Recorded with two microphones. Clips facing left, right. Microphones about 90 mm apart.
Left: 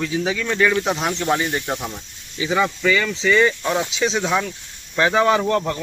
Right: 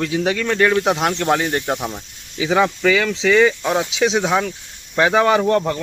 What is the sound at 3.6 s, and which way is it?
Speech, 10° right (ahead or behind).